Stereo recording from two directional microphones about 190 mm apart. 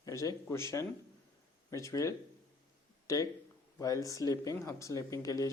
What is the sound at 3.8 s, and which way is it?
Speech, 15° left (ahead or behind).